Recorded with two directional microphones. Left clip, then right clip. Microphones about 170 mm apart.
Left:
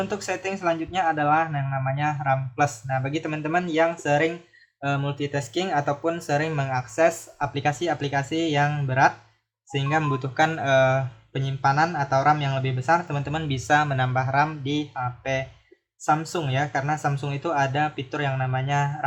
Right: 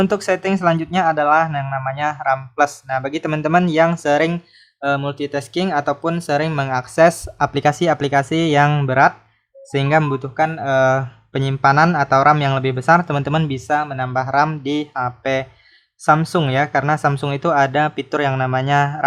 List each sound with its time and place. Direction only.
0.0 s speech: 50° right (ahead or behind)
10.2 s speech: 20° right (ahead or behind); by 13.5 s 40° right (ahead or behind)
13.5 s speech: 20° right (ahead or behind); by 19.0 s 40° right (ahead or behind)